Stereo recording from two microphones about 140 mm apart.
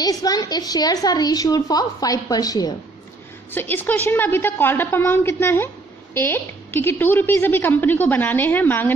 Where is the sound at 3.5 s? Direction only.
15° left (ahead or behind).